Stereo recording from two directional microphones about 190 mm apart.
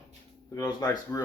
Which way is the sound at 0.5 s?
20° left (ahead or behind).